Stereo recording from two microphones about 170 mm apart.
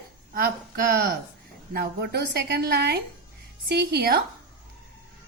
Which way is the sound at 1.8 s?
75° right (ahead or behind).